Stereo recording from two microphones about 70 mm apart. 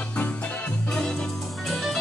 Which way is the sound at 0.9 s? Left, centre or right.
Centre.